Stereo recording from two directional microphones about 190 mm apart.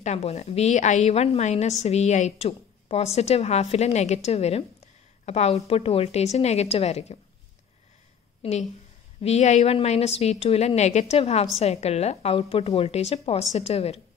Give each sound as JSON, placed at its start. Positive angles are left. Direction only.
{"t": 0.0, "sound": "a woman's voice", "side_deg": 35}
{"t": 8.4, "sound": "a woman's voice", "side_deg": 35}